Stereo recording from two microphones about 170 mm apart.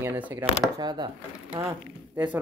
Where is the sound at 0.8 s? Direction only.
25° right (ahead or behind).